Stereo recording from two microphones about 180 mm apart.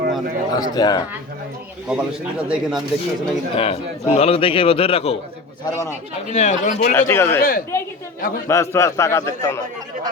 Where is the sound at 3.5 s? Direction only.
30° left (ahead or behind).